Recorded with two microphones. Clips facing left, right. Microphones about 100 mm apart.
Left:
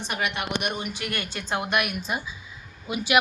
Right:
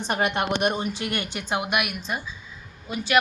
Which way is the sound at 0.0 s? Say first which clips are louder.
Right 5 dB; 40° right (ahead or behind).